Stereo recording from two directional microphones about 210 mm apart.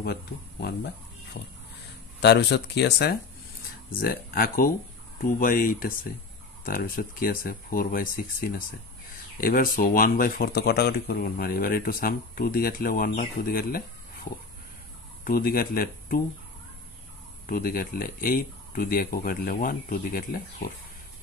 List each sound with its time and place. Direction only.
0.0 s speech: 50° left (ahead or behind)
15.2 s speech: 45° left (ahead or behind)
17.5 s speech: 45° left (ahead or behind)